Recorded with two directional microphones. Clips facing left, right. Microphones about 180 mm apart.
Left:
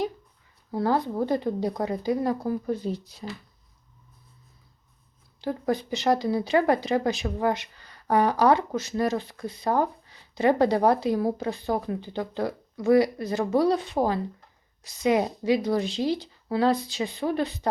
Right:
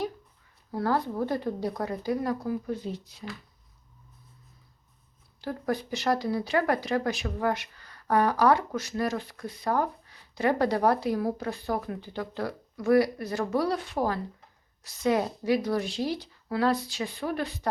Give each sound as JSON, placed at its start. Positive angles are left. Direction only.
{"t": 0.7, "sound": "speech", "side_deg": 20}
{"t": 2.5, "sound": "speech", "side_deg": 40}
{"t": 5.4, "sound": "speech", "side_deg": 20}